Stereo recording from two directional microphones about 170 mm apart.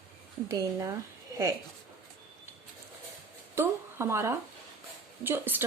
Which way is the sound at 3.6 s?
15° right (ahead or behind).